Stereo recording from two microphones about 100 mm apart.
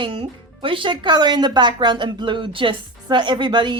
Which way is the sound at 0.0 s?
60° right (ahead or behind).